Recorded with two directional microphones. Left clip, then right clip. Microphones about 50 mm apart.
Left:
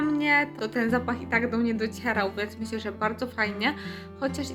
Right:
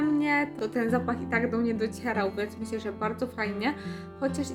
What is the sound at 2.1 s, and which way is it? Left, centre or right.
A woman's voice, right.